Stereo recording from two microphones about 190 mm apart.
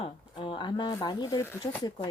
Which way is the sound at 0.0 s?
25° left (ahead or behind).